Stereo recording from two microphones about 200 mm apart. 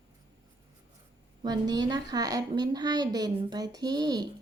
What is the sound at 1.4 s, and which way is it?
A woman's voice, 20° right (ahead or behind).